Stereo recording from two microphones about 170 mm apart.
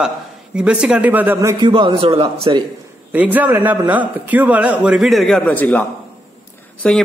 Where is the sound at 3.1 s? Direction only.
10° right (ahead or behind); by 5.8 s 10° left (ahead or behind).